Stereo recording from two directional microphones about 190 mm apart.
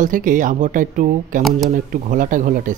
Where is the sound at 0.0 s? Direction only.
45° right (ahead or behind).